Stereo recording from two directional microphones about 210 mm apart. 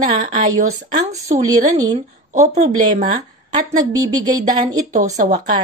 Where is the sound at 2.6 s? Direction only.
35° right (ahead or behind).